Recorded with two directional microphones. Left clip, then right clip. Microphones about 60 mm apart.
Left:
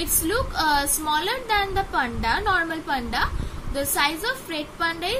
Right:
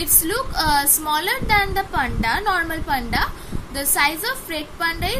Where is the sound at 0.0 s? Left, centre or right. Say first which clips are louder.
Right 2 dB; right.